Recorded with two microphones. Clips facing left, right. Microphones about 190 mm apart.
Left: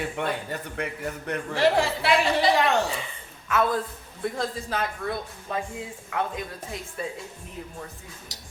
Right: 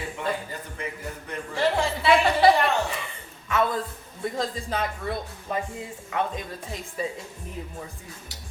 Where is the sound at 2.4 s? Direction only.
60° right (ahead or behind).